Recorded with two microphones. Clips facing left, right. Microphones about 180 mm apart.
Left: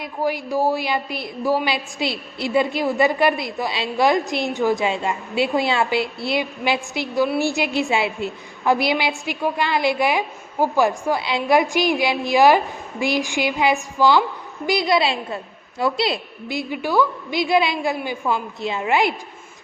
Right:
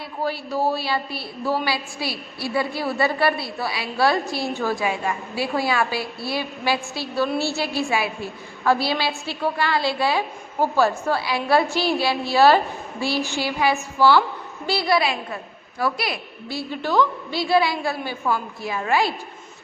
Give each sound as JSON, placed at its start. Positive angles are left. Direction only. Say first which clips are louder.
{"t": 0.0, "sound": "a woman's voice", "louder": "left 3 dB", "side_deg": 15}